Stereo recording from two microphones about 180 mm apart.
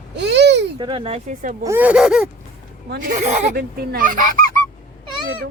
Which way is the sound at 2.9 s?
40° right (ahead or behind).